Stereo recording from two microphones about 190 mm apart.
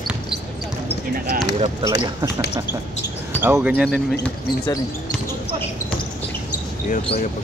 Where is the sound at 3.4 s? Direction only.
10° right (ahead or behind).